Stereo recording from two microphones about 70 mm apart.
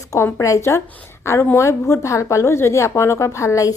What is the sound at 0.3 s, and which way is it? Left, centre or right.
A woman's voice, left.